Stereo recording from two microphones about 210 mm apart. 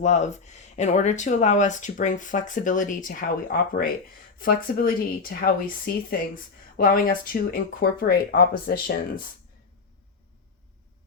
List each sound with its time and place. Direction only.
0.0 s speech: 35° left (ahead or behind)